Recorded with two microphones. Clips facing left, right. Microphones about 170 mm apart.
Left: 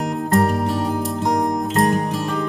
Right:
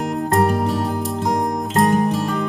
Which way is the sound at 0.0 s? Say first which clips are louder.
Even; centre (ahead or behind).